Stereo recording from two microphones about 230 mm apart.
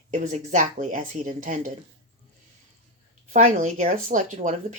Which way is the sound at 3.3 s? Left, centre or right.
Right.